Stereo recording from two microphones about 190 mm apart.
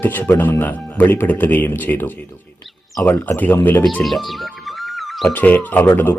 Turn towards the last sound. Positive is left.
turn(degrees=10)  # may be behind; listen again after turning